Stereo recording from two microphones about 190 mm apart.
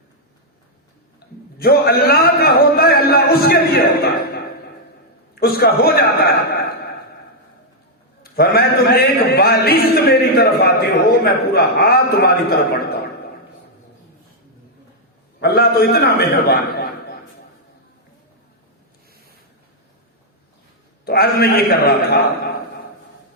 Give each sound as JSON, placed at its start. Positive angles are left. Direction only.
{"t": 1.5, "sound": "a man's voice", "side_deg": 55}
{"t": 5.3, "sound": "a man's voice", "side_deg": 55}
{"t": 8.2, "sound": "a man's voice", "side_deg": 55}
{"t": 15.4, "sound": "a man's voice", "side_deg": 55}
{"t": 21.0, "sound": "a man's voice", "side_deg": 55}